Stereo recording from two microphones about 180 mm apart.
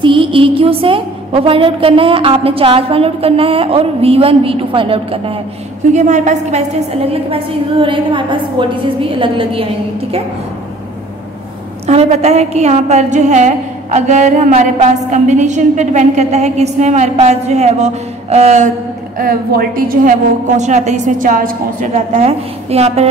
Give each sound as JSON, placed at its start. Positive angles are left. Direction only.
{"t": 0.0, "sound": "a woman's voice", "side_deg": -30}
{"t": 7.1, "sound": "a woman's voice", "side_deg": -30}
{"t": 11.8, "sound": "a woman's voice", "side_deg": -35}
{"t": 19.1, "sound": "a woman's voice", "side_deg": -55}